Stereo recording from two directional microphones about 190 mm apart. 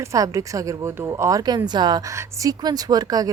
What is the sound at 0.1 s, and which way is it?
A woman's voice, 15° right (ahead or behind).